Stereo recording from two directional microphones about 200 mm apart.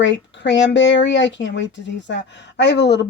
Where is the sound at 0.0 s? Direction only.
65° left (ahead or behind).